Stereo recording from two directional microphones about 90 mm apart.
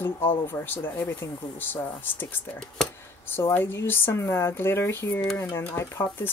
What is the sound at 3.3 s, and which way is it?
Speech, 25° left (ahead or behind).